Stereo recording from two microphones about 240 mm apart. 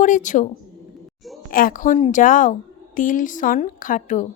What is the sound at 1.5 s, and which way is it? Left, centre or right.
A woman's voice, left.